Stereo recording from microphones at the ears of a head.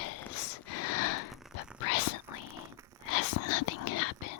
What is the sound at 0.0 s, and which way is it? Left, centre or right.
Whispering, left.